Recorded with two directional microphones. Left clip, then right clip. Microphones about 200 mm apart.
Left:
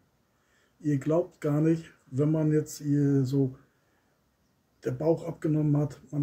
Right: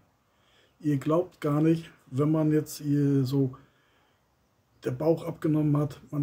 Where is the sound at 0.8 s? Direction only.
25° right (ahead or behind).